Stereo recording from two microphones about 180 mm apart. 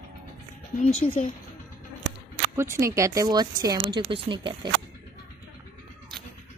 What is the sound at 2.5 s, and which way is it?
Speech, 15° right (ahead or behind).